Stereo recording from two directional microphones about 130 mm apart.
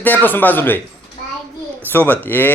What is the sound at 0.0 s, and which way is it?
Speech, 15° left (ahead or behind).